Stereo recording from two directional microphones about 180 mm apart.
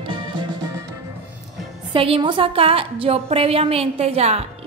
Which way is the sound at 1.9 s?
30° right (ahead or behind).